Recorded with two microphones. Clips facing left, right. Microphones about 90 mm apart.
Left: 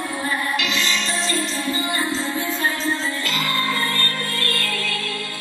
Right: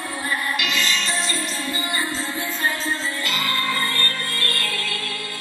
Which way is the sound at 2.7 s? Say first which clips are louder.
Left 2 dB; 15° right (ahead or behind).